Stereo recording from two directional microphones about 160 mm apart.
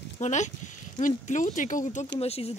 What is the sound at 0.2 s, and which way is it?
Speech, 50° left (ahead or behind).